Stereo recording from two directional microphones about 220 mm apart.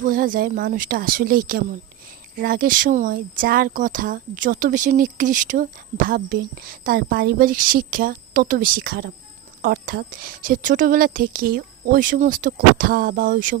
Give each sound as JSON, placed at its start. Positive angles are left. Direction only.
{"t": 0.0, "sound": "speech", "side_deg": -40}